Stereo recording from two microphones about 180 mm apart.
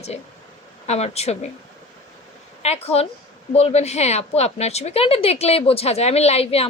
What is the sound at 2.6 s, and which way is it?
A woman's voice, 35° left (ahead or behind).